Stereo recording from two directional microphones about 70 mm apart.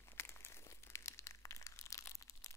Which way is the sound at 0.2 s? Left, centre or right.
Left.